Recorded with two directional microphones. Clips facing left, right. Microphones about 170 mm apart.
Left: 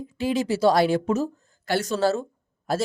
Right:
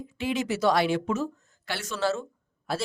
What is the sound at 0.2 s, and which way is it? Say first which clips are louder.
A man's voice: left 5 dB; 35° left (ahead or behind).